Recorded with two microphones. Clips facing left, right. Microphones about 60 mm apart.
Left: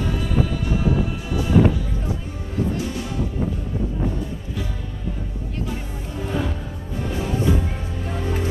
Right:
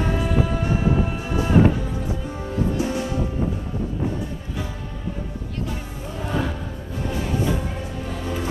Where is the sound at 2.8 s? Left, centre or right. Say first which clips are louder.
Right 3 dB; right.